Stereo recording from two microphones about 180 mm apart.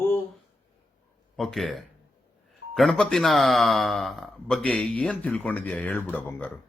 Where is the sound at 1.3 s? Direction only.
Centre (ahead or behind).